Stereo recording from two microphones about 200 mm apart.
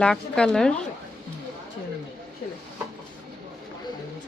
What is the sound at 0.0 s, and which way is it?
Speech, 5° left (ahead or behind).